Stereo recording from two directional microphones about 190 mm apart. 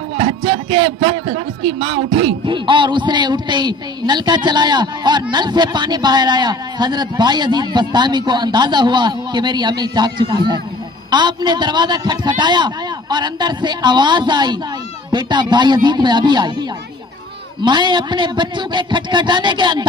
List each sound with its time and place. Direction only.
0.2 s a man's voice: 30° right (ahead or behind)
17.6 s a man's voice: 25° right (ahead or behind)